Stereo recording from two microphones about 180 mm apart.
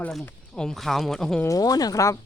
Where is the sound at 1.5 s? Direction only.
20° left (ahead or behind).